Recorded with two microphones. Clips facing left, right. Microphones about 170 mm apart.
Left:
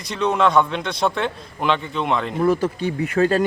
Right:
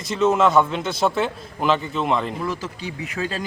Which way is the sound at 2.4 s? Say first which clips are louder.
Left 9 dB; 55° left (ahead or behind).